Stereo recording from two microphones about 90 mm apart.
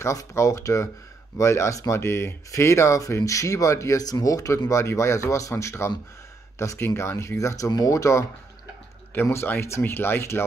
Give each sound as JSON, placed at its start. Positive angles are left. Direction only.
{"t": 0.0, "sound": "speech", "side_deg": 35}